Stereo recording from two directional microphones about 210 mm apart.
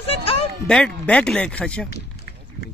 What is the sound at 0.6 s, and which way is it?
Speech, 5° left (ahead or behind).